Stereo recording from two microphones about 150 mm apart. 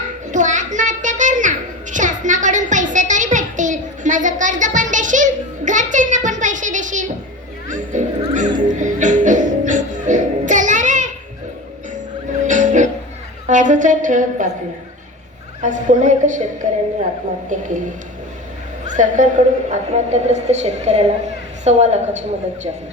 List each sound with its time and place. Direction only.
0.3 s a sound: 55° right (ahead or behind)
7.7 s music: 55° right (ahead or behind)
12.5 s music: 55° right (ahead or behind)
13.5 s speech: 55° right (ahead or behind)
15.6 s speech: 55° right (ahead or behind)
18.9 s a woman's voice: 55° right (ahead or behind)